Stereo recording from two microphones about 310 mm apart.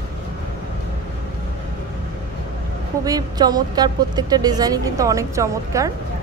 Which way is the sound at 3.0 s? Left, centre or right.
Centre.